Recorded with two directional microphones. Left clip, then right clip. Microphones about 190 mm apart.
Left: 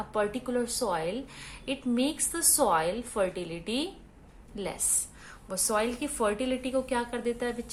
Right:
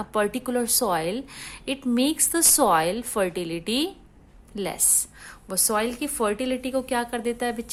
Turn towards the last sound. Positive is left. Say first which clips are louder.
# right 4 dB
turn(degrees=-50)  # may be behind; listen again after turning